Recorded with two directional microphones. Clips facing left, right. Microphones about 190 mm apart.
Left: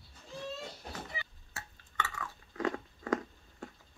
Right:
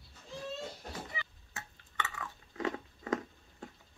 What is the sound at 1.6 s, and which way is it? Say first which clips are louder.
Chewing: left 1 dB; 20° right (ahead or behind).